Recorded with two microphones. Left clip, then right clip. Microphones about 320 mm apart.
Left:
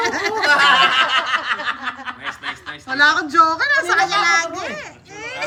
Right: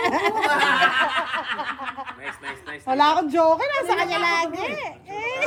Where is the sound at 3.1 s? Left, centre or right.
Centre.